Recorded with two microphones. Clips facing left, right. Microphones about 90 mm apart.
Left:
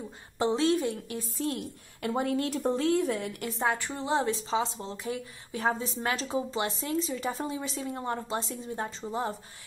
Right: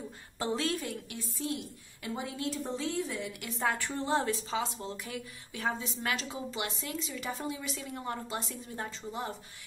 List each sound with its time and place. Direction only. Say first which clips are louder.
0.4 s a woman's voice: left 7 dB; 25° left (ahead or behind); by 3.4 s 50° left (ahead or behind)
3.6 s a woman's voice: left 2 dB; 20° left (ahead or behind); by 9.4 s 35° left (ahead or behind)